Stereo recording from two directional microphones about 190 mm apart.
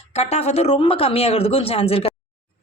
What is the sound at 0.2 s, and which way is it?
Speech, 35° left (ahead or behind).